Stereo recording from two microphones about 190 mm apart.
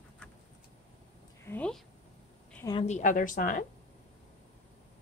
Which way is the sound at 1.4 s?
10° left (ahead or behind).